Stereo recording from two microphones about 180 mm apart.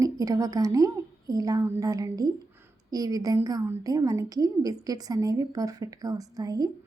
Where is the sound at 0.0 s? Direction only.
20° right (ahead or behind).